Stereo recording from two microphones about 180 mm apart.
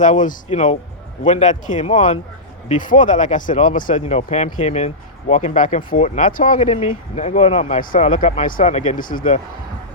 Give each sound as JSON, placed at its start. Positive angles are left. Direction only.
{"t": 0.0, "sound": "speech", "side_deg": 45}
{"t": 7.8, "sound": "speech", "side_deg": 45}